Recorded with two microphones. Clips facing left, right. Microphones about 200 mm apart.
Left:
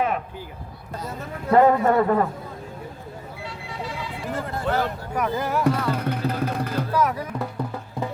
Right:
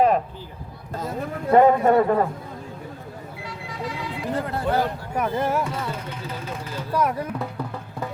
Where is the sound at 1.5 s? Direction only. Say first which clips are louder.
Right 1 dB; 20° right (ahead or behind).